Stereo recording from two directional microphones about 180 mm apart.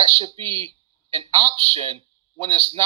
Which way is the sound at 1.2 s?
25° right (ahead or behind).